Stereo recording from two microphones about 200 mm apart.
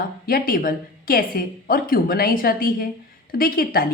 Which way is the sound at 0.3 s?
50° left (ahead or behind).